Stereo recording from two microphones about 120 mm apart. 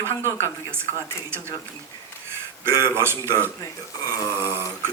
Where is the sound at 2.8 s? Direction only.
20° right (ahead or behind).